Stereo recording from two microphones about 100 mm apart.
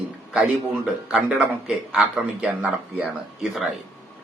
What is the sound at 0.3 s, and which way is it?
A man's voice, 10° right (ahead or behind).